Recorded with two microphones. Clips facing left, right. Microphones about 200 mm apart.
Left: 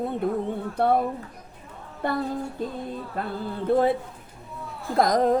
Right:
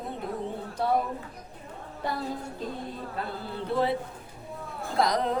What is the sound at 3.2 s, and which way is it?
Speech, 50° left (ahead or behind).